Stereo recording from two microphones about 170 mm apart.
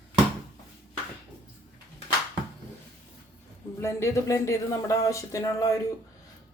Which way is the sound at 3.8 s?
15° left (ahead or behind).